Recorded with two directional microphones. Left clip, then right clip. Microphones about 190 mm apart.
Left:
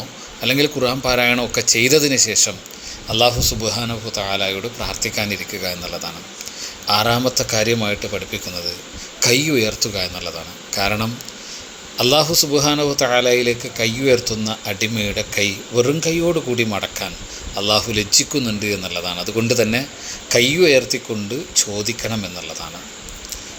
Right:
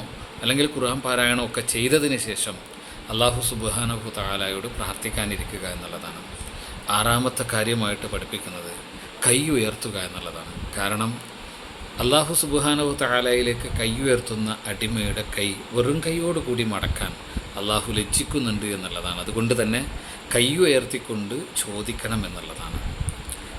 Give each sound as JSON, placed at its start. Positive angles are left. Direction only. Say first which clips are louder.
{"t": 0.4, "sound": "a man's voice", "louder": "left 5 dB", "side_deg": 25}
{"t": 6.8, "sound": "a man's voice", "louder": "left 5 dB", "side_deg": 20}